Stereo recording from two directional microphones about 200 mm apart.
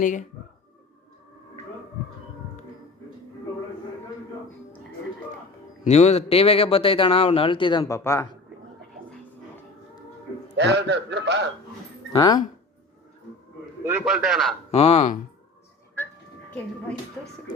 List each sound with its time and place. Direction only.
0.0 s speech: 40° left (ahead or behind)
5.8 s a man's voice: 35° left (ahead or behind); by 8.3 s 15° left (ahead or behind)
10.6 s a man's voice: 60° right (ahead or behind)
12.1 s a man's voice: 20° left (ahead or behind)
13.8 s a man's voice: 5° right (ahead or behind)
14.7 s speech: 30° left (ahead or behind)